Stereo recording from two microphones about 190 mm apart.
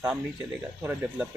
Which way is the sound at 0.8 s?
10° right (ahead or behind).